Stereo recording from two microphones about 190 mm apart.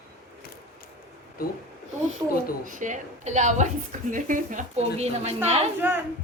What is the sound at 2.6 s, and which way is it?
A woman's voice, 45° right (ahead or behind).